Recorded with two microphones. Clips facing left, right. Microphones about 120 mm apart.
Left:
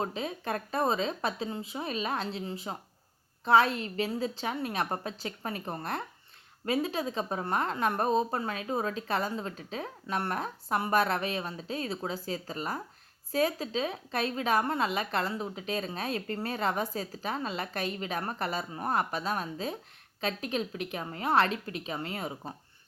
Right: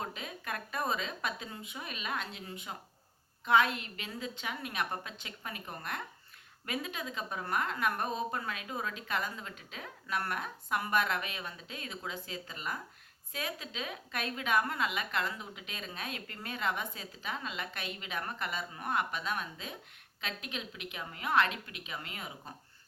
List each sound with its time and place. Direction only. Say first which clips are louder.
0.0 s a woman's voice: left 8 dB; 30° left (ahead or behind)